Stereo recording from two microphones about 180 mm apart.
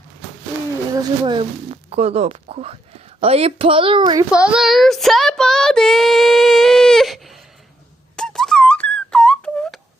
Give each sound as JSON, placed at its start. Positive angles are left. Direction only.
{"t": 0.9, "sound": "a woman's voice", "side_deg": -25}
{"t": 4.3, "sound": "speech", "side_deg": -5}
{"t": 8.1, "sound": "whistle", "side_deg": 5}